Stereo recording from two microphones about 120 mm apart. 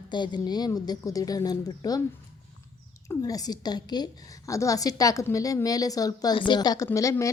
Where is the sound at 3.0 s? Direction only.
30° left (ahead or behind).